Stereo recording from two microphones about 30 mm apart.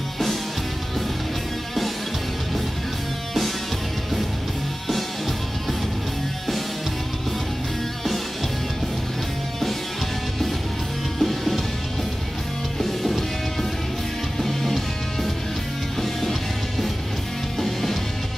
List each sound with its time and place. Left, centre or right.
11.1 s music: centre
12.7 s music: centre
16.0 s music: centre
17.6 s music: centre